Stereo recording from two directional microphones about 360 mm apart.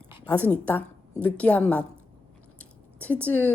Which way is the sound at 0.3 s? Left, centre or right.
Centre.